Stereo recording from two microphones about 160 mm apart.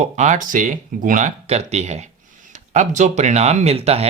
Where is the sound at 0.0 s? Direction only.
50° right (ahead or behind).